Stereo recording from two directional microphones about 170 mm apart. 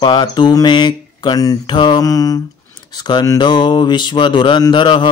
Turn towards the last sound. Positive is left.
turn(degrees=30)  # may be behind; listen again after turning